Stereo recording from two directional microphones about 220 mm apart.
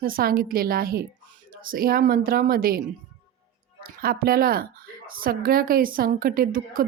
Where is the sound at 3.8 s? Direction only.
45° right (ahead or behind).